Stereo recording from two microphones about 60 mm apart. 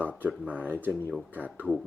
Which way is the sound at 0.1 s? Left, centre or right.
Right.